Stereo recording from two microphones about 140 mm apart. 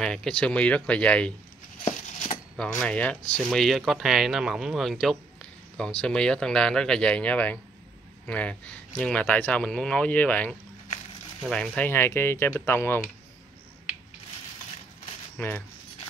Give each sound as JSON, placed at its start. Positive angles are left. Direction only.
{"t": 0.0, "sound": "speech", "side_deg": 5}
{"t": 1.9, "sound": "a sound", "side_deg": 55}
{"t": 2.5, "sound": "speech", "side_deg": 5}
{"t": 15.3, "sound": "speech", "side_deg": 10}